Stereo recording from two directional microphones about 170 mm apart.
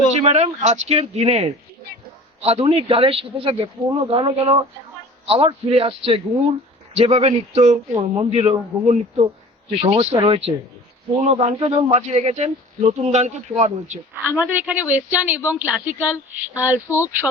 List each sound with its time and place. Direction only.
0.2 s speech: 40° right (ahead or behind)
7.9 s speech: 25° right (ahead or behind); by 14.0 s 40° right (ahead or behind)
14.3 s speech: 10° right (ahead or behind)